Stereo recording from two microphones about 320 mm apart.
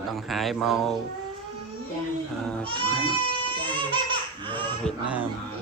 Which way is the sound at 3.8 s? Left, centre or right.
Centre.